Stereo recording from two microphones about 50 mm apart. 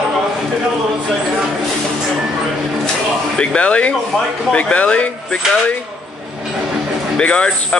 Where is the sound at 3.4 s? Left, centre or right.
Left.